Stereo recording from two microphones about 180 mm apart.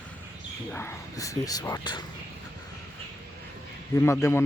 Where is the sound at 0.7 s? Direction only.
10° left (ahead or behind).